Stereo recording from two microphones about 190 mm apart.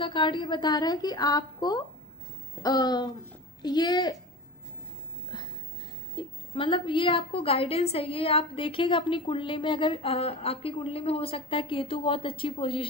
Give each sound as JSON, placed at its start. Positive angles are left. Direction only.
{"t": 0.0, "sound": "a woman's voice", "side_deg": 25}
{"t": 6.1, "sound": "a woman's voice", "side_deg": 25}